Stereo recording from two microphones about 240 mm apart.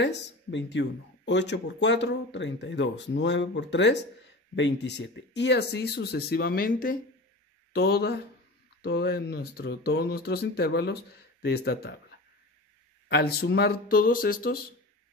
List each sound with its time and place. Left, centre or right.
0.0 s speech: left
13.1 s speech: left